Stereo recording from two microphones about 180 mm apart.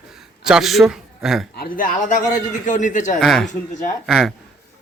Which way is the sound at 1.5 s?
55° left (ahead or behind).